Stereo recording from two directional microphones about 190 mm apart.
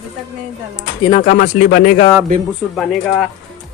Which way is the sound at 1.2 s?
45° left (ahead or behind).